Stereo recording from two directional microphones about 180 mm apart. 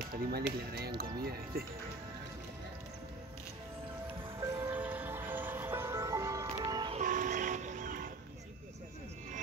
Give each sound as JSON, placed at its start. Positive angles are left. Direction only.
{"t": 0.1, "sound": "speech", "side_deg": -60}
{"t": 4.4, "sound": "music", "side_deg": -15}
{"t": 7.0, "sound": "music", "side_deg": -45}